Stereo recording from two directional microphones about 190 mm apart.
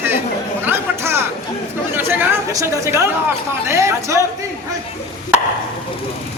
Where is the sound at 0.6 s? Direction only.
10° right (ahead or behind).